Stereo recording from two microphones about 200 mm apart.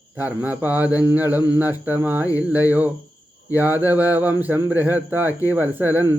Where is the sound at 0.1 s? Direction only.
10° right (ahead or behind).